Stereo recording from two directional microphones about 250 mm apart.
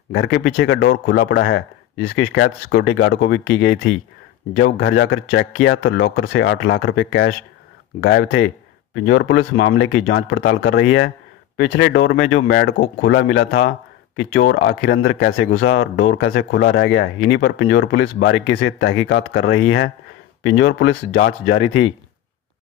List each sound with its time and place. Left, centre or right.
0.1 s speech: left
4.6 s speech: left
5.5 s speech: left